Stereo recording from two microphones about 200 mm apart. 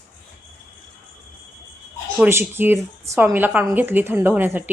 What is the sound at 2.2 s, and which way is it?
Speech, 10° right (ahead or behind).